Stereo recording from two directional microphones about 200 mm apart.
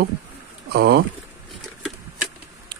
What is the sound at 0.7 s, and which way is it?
Speech, 55° right (ahead or behind).